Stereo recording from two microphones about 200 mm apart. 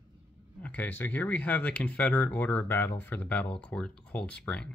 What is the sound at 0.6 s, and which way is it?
Speech, 10° left (ahead or behind).